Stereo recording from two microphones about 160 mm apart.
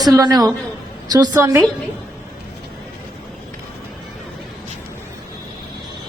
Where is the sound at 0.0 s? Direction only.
25° right (ahead or behind).